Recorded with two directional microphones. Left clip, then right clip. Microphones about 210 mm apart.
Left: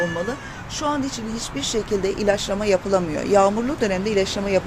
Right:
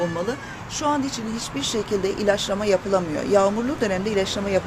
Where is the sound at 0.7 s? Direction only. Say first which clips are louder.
Right 1 dB; 5° left (ahead or behind).